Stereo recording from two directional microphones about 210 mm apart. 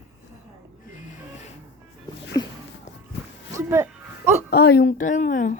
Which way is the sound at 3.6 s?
10° right (ahead or behind).